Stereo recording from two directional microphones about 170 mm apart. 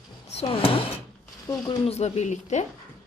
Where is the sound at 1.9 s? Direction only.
40° left (ahead or behind).